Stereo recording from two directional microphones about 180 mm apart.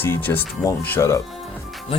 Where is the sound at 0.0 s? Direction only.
10° left (ahead or behind).